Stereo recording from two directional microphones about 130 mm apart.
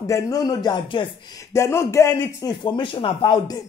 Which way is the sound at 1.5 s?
20° left (ahead or behind).